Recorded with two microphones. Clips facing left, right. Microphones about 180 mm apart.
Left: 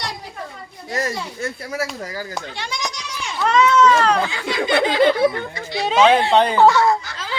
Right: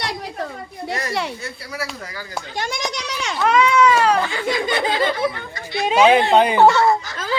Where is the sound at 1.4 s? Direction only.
50° left (ahead or behind).